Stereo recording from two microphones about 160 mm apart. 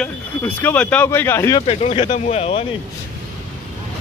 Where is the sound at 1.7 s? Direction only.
40° left (ahead or behind).